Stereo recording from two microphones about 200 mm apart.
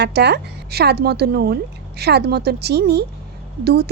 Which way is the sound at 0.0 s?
55° right (ahead or behind).